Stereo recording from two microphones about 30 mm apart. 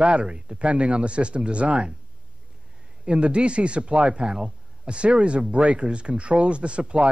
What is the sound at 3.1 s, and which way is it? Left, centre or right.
Speech, right.